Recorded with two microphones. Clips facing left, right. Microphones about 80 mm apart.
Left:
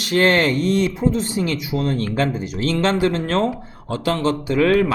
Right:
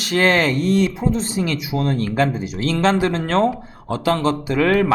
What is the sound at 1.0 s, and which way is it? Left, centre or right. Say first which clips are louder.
Speech: left 1 dB; right.